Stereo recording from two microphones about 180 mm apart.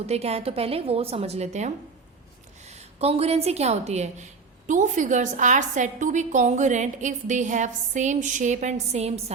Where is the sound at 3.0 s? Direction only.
35° right (ahead or behind).